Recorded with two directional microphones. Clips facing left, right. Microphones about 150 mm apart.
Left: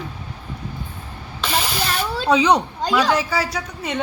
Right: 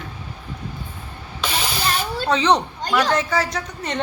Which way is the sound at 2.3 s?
10° left (ahead or behind).